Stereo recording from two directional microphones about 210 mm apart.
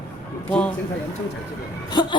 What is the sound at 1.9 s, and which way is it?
Speech, 20° left (ahead or behind).